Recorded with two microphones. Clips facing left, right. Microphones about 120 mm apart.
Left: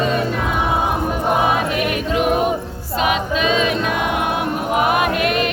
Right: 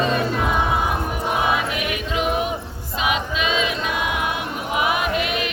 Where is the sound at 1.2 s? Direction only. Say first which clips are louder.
Left 4 dB; 45° left (ahead or behind).